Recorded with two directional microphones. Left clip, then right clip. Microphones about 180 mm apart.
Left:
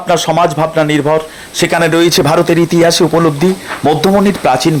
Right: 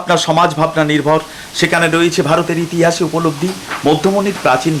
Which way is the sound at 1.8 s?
45° left (ahead or behind).